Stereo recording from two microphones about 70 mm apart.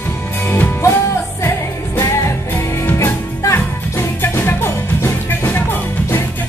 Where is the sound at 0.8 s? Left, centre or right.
Left.